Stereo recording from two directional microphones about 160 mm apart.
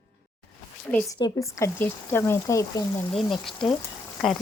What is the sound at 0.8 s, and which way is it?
Speech, 5° left (ahead or behind).